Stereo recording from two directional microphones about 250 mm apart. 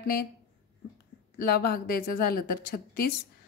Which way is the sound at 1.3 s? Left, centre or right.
Left.